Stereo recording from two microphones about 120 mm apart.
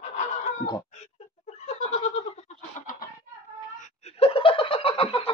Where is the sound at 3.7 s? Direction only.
60° left (ahead or behind).